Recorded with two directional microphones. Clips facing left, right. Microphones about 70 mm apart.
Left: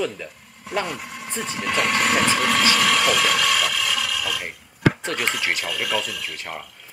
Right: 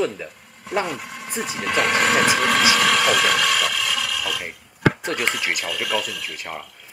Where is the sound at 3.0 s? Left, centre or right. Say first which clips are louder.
Right 1 dB; right.